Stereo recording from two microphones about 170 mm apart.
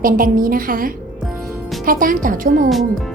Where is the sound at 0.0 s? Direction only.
55° right (ahead or behind).